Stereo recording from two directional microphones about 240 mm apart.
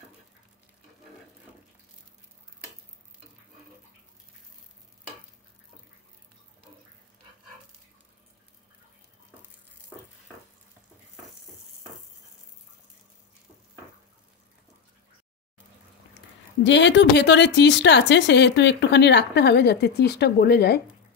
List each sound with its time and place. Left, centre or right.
16.6 s a woman's voice: left